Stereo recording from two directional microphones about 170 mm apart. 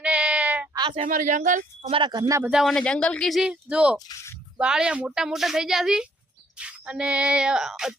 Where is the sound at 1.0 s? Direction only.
45° right (ahead or behind).